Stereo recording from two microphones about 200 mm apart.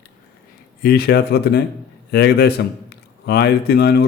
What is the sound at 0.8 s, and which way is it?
A man's voice, 50° left (ahead or behind).